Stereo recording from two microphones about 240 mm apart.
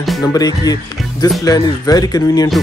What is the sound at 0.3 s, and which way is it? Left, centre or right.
Speech, centre.